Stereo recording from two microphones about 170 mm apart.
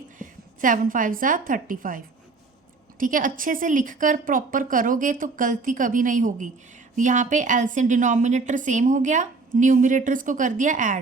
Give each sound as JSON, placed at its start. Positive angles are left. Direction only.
{"t": 0.2, "sound": "a woman's voice", "side_deg": -50}
{"t": 3.0, "sound": "a woman's voice", "side_deg": -50}